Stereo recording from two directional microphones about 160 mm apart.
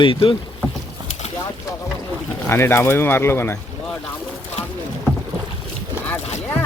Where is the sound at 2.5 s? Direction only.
15° left (ahead or behind).